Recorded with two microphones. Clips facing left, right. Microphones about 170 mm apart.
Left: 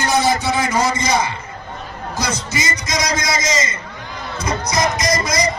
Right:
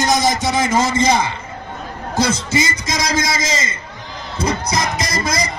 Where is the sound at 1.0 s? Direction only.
25° right (ahead or behind).